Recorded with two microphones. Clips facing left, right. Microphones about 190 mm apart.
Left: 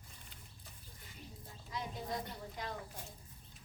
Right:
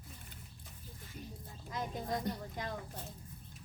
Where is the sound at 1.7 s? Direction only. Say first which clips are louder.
Right 3 dB; 50° right (ahead or behind).